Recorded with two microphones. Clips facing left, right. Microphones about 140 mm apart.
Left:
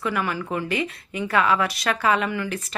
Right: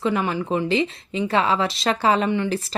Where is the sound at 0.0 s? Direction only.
25° right (ahead or behind).